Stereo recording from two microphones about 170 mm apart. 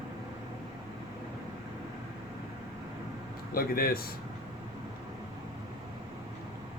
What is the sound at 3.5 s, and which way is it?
Speech, 60° left (ahead or behind).